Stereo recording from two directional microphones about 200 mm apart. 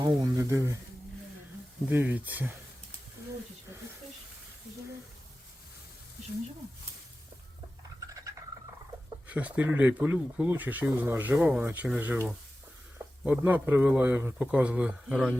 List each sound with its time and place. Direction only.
0.0 s speech: 15° right (ahead or behind)
1.9 s speech: 10° right (ahead or behind)
8.0 s a sound: 15° right (ahead or behind)
9.2 s speech: 5° right (ahead or behind)
13.2 s speech: 10° right (ahead or behind)